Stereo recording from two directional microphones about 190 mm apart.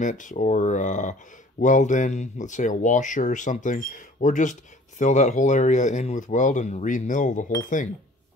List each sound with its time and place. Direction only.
0.0 s speech: 40° left (ahead or behind)